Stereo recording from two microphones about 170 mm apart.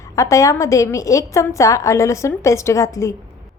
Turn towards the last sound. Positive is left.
turn(degrees=15)  # may be behind; listen again after turning